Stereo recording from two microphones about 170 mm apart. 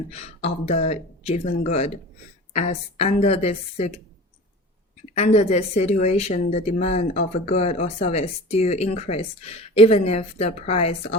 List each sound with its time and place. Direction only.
0.1 s a woman's voice: 40° left (ahead or behind)
5.1 s a woman's voice: 40° left (ahead or behind)